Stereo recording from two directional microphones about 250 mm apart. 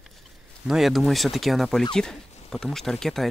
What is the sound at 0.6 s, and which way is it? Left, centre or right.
Speech, centre.